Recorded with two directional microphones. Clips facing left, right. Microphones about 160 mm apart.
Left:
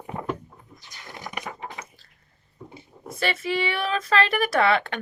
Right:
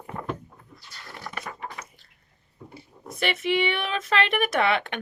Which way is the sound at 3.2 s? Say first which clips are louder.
Right 1 dB; 20° right (ahead or behind).